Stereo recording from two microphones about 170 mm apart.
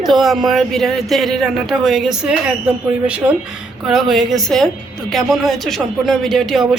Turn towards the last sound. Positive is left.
turn(degrees=0)  # may be behind; listen again after turning